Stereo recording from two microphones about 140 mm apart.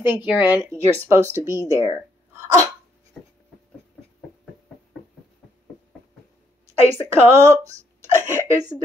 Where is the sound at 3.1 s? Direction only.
5° left (ahead or behind).